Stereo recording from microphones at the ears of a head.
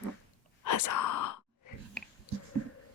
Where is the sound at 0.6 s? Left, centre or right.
Left.